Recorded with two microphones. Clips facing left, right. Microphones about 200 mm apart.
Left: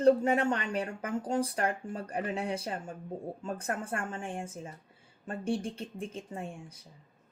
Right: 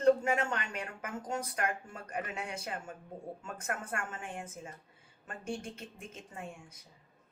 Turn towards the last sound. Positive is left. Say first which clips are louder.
# left 5 dB
turn(degrees=30)  # may be behind; listen again after turning